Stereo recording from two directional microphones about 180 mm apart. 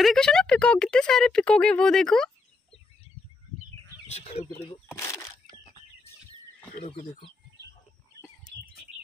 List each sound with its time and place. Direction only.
0.0 s speech: centre (ahead or behind)
4.1 s speech: 35° left (ahead or behind)
4.6 s a sound: 20° left (ahead or behind)
6.8 s speech: 30° left (ahead or behind)